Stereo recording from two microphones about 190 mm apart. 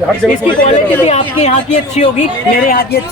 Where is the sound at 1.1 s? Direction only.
35° left (ahead or behind).